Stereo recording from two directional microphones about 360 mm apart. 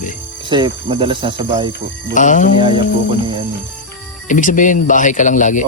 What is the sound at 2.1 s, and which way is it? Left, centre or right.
Speech, left.